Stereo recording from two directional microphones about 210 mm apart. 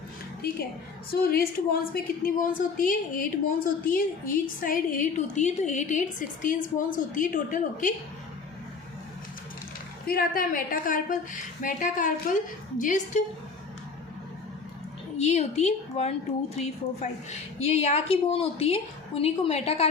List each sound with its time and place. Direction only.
1.1 s a woman's voice: 45° left (ahead or behind)
10.1 s a woman's voice: 45° left (ahead or behind)
15.2 s a woman's voice: 30° left (ahead or behind)